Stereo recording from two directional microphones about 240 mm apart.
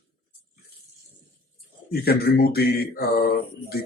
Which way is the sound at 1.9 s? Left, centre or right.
Left.